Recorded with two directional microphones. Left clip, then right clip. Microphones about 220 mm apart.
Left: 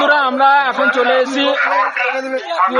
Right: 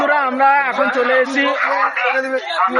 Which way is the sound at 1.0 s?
15° left (ahead or behind).